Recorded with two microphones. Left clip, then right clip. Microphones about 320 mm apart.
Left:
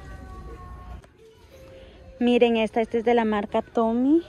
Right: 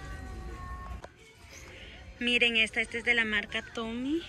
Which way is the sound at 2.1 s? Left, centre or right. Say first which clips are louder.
Left 6 dB; centre.